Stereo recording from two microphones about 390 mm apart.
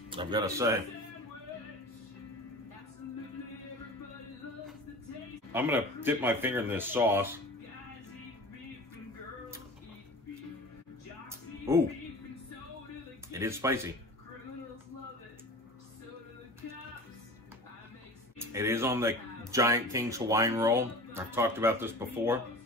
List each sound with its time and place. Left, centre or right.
0.1 s speech: centre
5.5 s speech: centre
11.2 s music: centre
13.3 s speech: centre
18.4 s speech: centre